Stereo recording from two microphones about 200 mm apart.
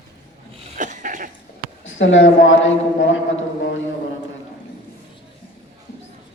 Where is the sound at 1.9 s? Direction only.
70° left (ahead or behind).